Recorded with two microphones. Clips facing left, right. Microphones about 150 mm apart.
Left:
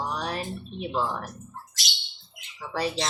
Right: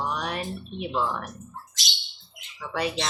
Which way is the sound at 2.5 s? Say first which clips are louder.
Even; 35° left (ahead or behind).